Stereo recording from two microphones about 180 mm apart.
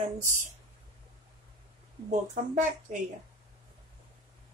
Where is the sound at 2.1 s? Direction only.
45° right (ahead or behind).